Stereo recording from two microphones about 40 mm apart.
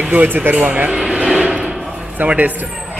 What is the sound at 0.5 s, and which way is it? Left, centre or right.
Speech, right.